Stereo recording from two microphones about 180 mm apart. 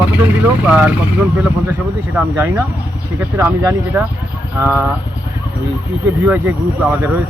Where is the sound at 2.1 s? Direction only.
10° right (ahead or behind).